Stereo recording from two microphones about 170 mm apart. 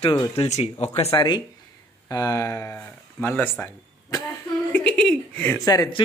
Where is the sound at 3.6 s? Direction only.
20° left (ahead or behind).